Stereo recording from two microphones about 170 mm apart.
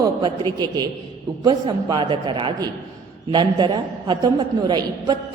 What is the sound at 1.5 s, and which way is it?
A woman's voice, 25° right (ahead or behind).